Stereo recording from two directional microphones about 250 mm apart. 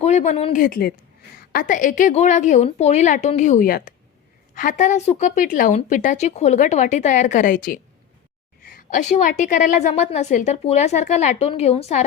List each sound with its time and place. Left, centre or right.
0.0 s a woman's voice: left